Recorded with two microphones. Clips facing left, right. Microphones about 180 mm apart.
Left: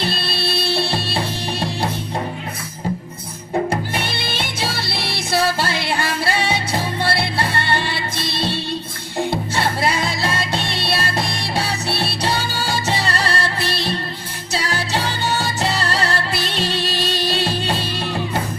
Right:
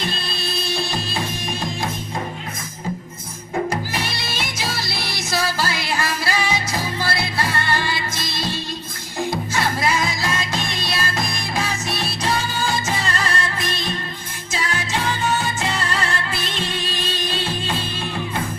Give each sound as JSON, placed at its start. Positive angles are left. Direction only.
{"t": 0.7, "sound": "music", "side_deg": 70}
{"t": 4.2, "sound": "music", "side_deg": 30}
{"t": 4.7, "sound": "music", "side_deg": 60}
{"t": 5.4, "sound": "music", "side_deg": 25}
{"t": 7.9, "sound": "music", "side_deg": 60}
{"t": 9.1, "sound": "music", "side_deg": 30}
{"t": 16.6, "sound": "music", "side_deg": 80}
{"t": 17.4, "sound": "music", "side_deg": 35}